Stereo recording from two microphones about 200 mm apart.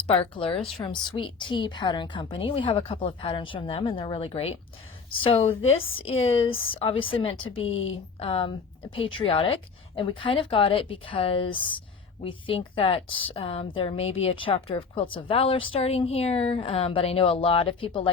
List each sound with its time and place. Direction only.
0.1 s a woman's voice: 30° left (ahead or behind)
5.6 s speech: 80° left
6.1 s a woman's voice: 30° left (ahead or behind)